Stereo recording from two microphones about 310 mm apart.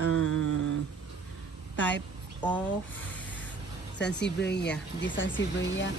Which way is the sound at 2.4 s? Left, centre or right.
Centre.